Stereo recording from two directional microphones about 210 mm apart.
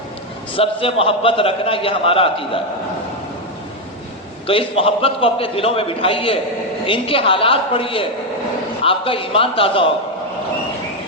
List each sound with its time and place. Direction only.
0.5 s a man's voice: 25° left (ahead or behind)
4.4 s a man's voice: 25° left (ahead or behind)